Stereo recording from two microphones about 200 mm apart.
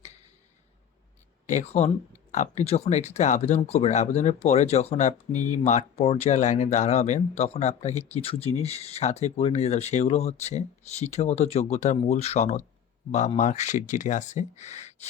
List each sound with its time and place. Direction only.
1.5 s speech: 35° left (ahead or behind)